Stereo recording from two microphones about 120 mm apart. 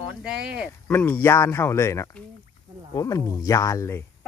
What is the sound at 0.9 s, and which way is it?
Speech, 15° left (ahead or behind).